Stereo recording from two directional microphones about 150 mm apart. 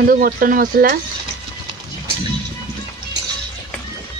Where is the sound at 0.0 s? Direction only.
75° right (ahead or behind).